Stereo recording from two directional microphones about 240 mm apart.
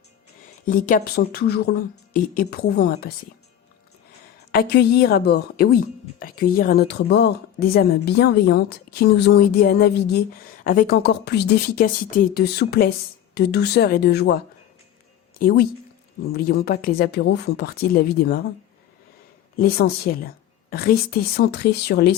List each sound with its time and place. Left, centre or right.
0.6 s a woman's voice: left
4.5 s a woman's voice: left
19.5 s a woman's voice: left